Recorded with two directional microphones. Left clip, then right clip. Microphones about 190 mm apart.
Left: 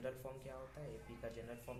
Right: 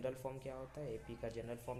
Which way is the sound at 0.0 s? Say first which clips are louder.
Right 4 dB; 40° right (ahead or behind).